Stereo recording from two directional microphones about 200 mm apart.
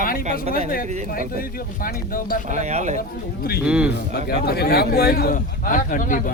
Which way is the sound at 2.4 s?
35° right (ahead or behind).